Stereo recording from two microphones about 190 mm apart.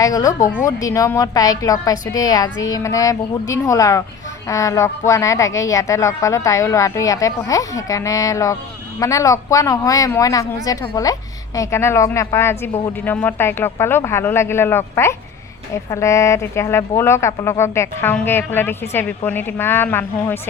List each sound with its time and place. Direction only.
0.0 s speech: 15° left (ahead or behind)